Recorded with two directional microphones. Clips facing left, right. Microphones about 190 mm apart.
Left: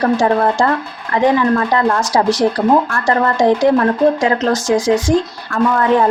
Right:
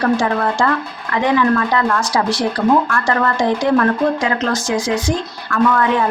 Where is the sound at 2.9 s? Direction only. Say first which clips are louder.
Left 2 dB; 30° left (ahead or behind).